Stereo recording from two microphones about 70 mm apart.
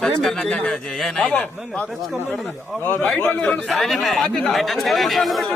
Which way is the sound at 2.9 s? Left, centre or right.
Left.